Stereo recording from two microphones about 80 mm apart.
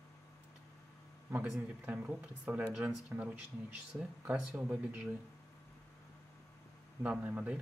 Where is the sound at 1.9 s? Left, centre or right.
Centre.